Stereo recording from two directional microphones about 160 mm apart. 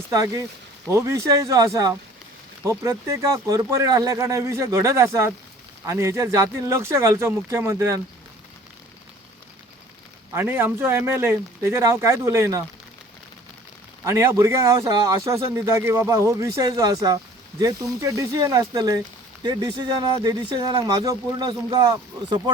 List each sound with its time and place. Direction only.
0.1 s a man's voice: 20° right (ahead or behind)
10.3 s speech: 15° right (ahead or behind)
14.0 s a man's voice: 15° right (ahead or behind)